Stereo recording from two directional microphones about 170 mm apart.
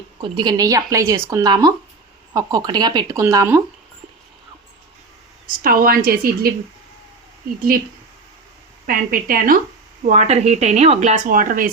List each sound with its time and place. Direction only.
0.2 s speech: 25° right (ahead or behind)
5.6 s a woman's voice: 60° right (ahead or behind)
8.9 s a woman's voice: 55° right (ahead or behind)
10.1 s speech: 40° right (ahead or behind)
11.3 s speech: 55° right (ahead or behind)